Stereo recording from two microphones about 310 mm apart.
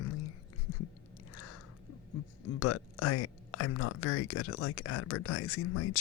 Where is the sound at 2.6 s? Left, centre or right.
Left.